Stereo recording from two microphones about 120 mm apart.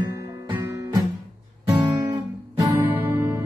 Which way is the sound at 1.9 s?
35° right (ahead or behind).